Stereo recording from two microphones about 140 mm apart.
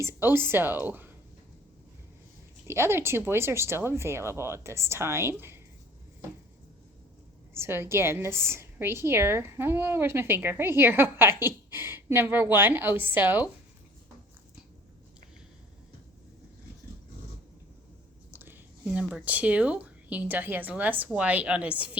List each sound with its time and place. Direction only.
0.0 s a woman's voice: 15° right (ahead or behind)
2.6 s a woman's voice: 15° right (ahead or behind)
7.5 s a woman's voice: 15° right (ahead or behind)
18.3 s a woman's voice: 15° right (ahead or behind)